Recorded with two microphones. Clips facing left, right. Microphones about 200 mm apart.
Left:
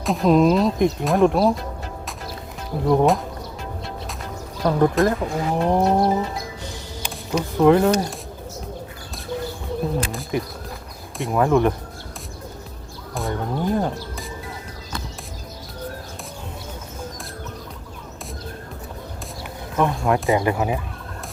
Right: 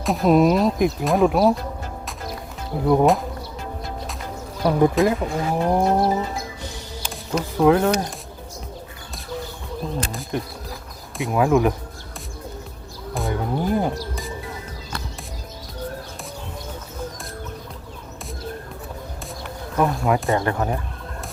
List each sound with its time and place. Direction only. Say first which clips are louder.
0.0 s speech: even; 5° right (ahead or behind)
2.8 s speech: right 1 dB; 5° right (ahead or behind)
4.6 s speech: right 1 dB; 10° right (ahead or behind)
7.3 s speech: left 1 dB; centre (ahead or behind)
10.1 s speech: left 2 dB; centre (ahead or behind)
13.1 s music: right 1 dB; 5° right (ahead or behind)
19.7 s speech: even; centre (ahead or behind)